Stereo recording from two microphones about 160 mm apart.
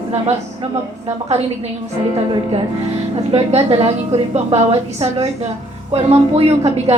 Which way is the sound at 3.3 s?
40° right (ahead or behind).